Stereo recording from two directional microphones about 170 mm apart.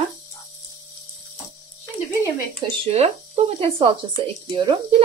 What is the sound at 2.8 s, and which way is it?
Speech, 40° right (ahead or behind).